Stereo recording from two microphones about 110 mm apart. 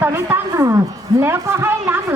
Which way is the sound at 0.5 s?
35° right (ahead or behind).